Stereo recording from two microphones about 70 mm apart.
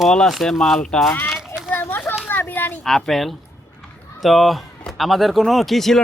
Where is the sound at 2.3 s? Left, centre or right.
Left.